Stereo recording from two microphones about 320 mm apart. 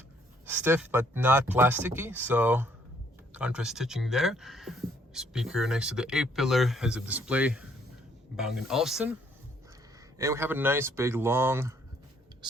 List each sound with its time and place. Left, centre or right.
0.4 s speech: centre
10.2 s speech: centre